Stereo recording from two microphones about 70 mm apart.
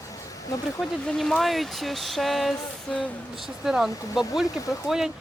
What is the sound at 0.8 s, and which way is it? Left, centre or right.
Speech, centre.